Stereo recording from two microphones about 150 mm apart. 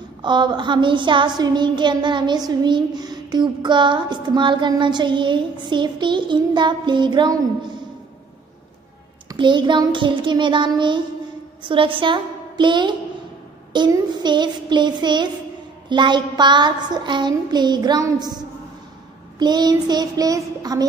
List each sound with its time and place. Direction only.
0.2 s child singing: 30° right (ahead or behind)
9.3 s child singing: 30° right (ahead or behind)
11.6 s a woman's voice: 35° right (ahead or behind)
13.7 s a sound: 30° right (ahead or behind)